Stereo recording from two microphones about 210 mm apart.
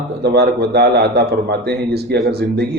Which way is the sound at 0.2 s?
50° right (ahead or behind).